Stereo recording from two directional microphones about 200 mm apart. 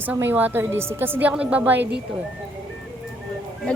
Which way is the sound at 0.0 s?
10° right (ahead or behind).